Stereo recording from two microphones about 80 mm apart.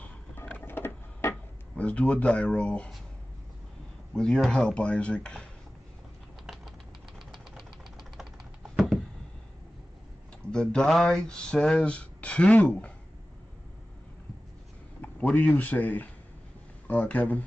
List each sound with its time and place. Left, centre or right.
0.5 s printer: left
1.8 s speech: centre
4.1 s speech: centre
6.4 s typing: centre
7.2 s engine knocking: centre
8.7 s a sound: centre
10.5 s speech: centre
15.0 s speech: centre